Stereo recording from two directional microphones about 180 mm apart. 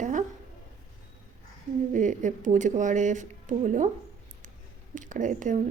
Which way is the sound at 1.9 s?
45° right (ahead or behind).